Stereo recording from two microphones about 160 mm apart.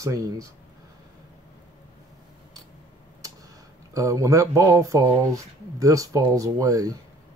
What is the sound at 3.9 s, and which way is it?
Speech, 20° right (ahead or behind).